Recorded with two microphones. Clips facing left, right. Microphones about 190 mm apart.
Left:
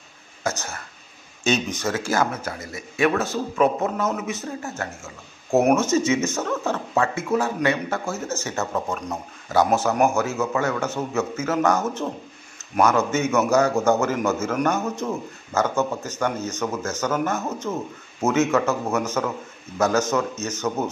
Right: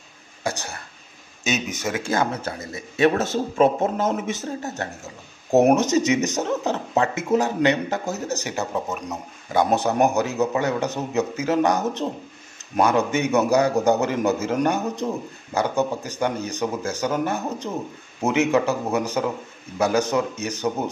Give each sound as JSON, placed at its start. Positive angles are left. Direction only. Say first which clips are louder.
{"t": 1.4, "sound": "speech", "louder": "left 3 dB", "side_deg": -5}
{"t": 2.1, "sound": "a man's voice", "louder": "even", "side_deg": -30}
{"t": 9.8, "sound": "a man's voice", "louder": "even", "side_deg": -30}
{"t": 10.1, "sound": "a man's voice", "louder": "right 1 dB", "side_deg": -15}